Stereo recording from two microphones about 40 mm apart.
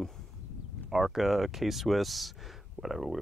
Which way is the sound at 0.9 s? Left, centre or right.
Centre.